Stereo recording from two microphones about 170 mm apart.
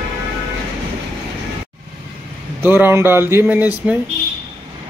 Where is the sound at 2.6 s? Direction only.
10° right (ahead or behind).